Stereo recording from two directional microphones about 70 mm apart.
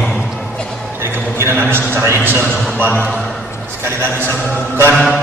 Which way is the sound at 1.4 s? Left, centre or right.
Right.